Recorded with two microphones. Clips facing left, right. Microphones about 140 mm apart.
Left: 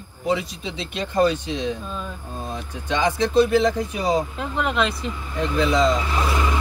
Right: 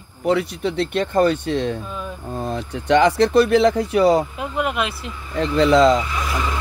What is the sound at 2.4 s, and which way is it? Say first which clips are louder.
Speech: right 6 dB; 70° right (ahead or behind).